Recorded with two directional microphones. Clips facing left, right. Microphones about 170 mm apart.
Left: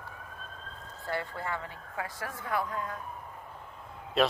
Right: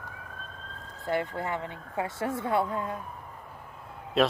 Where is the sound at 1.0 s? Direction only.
20° right (ahead or behind).